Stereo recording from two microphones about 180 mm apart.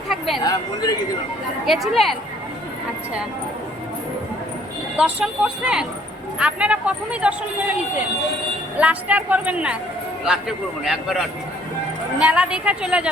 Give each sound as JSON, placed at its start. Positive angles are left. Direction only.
{"t": 0.4, "sound": "speech", "side_deg": 20}
{"t": 1.6, "sound": "a woman's voice", "side_deg": 0}
{"t": 4.9, "sound": "a woman's voice", "side_deg": -5}
{"t": 8.8, "sound": "speech", "side_deg": -10}
{"t": 10.8, "sound": "a woman's voice", "side_deg": 0}